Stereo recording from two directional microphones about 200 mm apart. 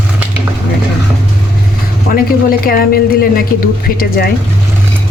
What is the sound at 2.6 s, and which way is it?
A woman's voice, 50° left (ahead or behind).